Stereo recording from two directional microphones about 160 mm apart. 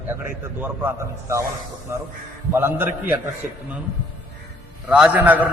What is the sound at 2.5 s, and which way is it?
Speech, 15° right (ahead or behind).